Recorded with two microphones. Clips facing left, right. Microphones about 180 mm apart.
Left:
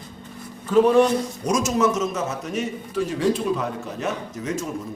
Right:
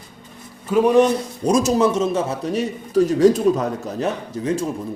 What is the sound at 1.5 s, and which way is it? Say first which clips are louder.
A man's voice: right 5 dB; 30° right (ahead or behind).